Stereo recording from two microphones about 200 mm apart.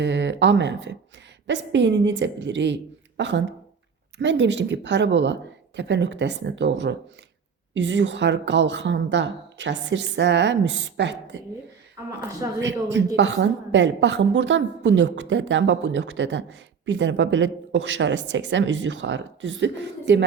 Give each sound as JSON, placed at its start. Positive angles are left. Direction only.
{"t": 0.0, "sound": "a woman's voice", "side_deg": -60}
{"t": 12.6, "sound": "a woman's voice", "side_deg": -65}